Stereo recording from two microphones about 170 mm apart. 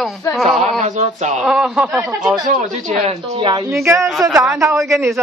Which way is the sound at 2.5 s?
45° right (ahead or behind).